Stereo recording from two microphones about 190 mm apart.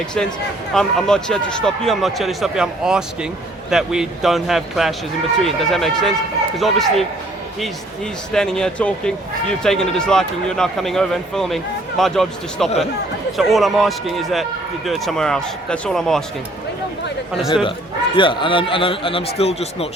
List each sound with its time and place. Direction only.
0.7 s speech: centre (ahead or behind)
8.3 s speech: 5° left (ahead or behind)
17.5 s speech: 25° left (ahead or behind)